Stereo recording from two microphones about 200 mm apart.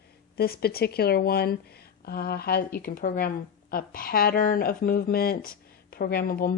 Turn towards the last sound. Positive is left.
turn(degrees=45)  # may be behind; listen again after turning